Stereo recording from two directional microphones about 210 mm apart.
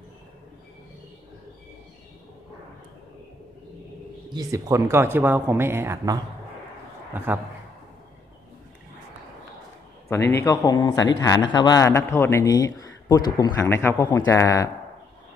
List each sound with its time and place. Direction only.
4.3 s speech: 15° right (ahead or behind)
10.0 s a man's voice: 15° left (ahead or behind)